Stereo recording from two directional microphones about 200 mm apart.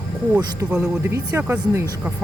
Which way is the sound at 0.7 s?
5° right (ahead or behind).